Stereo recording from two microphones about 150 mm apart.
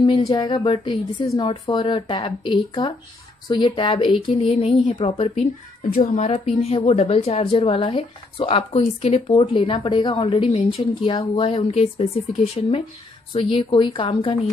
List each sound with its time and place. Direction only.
0.0 s a woman's voice: 30° left (ahead or behind)
4.4 s a woman's voice: 50° left (ahead or behind)